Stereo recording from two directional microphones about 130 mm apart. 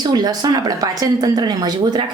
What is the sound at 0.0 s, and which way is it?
Speech, 30° right (ahead or behind).